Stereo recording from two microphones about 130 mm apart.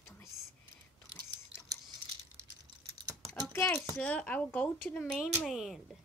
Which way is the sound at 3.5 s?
20° left (ahead or behind).